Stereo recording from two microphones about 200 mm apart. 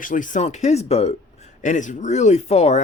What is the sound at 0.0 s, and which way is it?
Speech, 40° left (ahead or behind).